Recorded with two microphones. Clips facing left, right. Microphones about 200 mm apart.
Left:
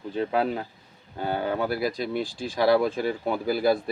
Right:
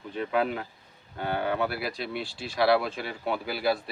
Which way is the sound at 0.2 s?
30° left (ahead or behind).